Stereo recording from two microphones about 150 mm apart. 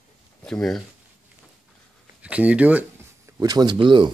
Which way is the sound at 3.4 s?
25° right (ahead or behind).